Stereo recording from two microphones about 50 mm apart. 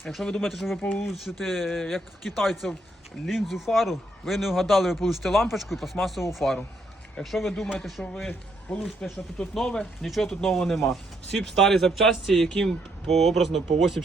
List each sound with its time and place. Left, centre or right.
0.0 s a man's voice: centre
8.7 s speech: centre
9.6 s a man's voice: centre